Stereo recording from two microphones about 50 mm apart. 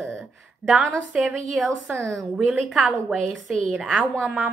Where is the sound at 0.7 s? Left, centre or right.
Centre.